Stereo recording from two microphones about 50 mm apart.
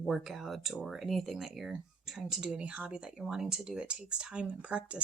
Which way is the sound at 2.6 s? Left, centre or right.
Right.